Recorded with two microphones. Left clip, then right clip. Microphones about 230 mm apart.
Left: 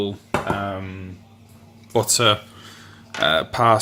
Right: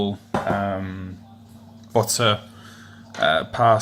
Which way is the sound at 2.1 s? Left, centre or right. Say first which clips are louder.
Left 3 dB; left.